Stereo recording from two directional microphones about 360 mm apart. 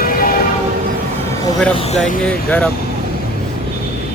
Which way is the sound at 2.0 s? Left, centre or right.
Centre.